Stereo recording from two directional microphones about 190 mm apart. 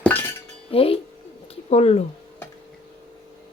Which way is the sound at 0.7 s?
30° left (ahead or behind).